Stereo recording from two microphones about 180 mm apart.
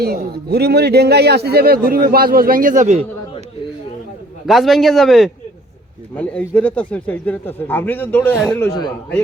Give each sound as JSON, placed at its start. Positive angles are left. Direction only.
{"t": 0.0, "sound": "a man's voice", "side_deg": -60}
{"t": 4.4, "sound": "a man's voice", "side_deg": 0}